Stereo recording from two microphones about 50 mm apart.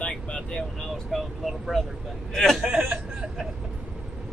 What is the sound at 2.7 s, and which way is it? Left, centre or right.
Speech, centre.